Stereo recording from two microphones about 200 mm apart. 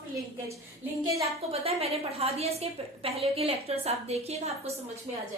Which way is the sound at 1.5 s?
30° right (ahead or behind).